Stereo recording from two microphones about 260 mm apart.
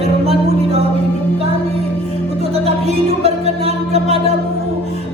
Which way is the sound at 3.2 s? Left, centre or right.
Right.